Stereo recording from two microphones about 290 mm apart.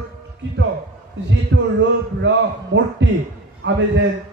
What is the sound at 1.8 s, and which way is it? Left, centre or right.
A man's voice, right.